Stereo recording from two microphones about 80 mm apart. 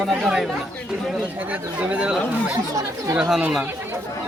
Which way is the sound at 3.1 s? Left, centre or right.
Centre.